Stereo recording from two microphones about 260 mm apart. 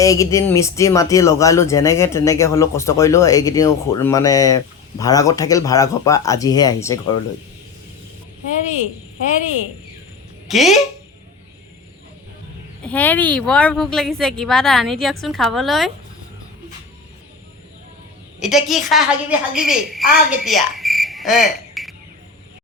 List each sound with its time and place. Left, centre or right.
0.0 s speech: centre
8.6 s speech: left
10.5 s speech: centre
12.8 s speech: centre
18.3 s speech: centre
20.3 s cricket: centre